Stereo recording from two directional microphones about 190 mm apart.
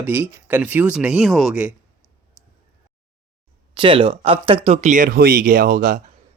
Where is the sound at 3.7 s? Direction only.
25° right (ahead or behind).